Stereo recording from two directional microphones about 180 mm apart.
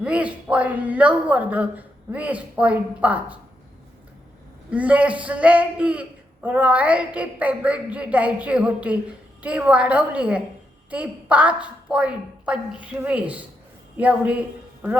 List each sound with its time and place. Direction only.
0.0 s speech: 5° right (ahead or behind)
4.7 s a man's voice: 10° right (ahead or behind)